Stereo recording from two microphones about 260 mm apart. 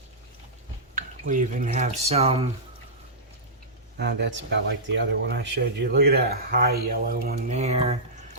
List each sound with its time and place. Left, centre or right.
0.9 s speech: right
3.9 s speech: right